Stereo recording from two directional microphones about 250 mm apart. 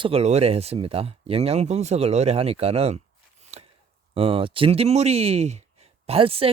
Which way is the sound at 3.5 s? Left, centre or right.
Right.